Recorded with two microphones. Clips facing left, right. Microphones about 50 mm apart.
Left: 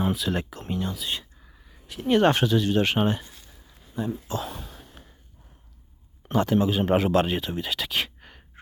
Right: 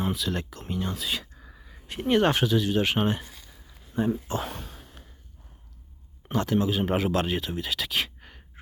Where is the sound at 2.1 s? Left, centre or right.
Centre.